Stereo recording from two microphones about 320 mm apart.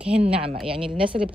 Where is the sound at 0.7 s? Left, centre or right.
Centre.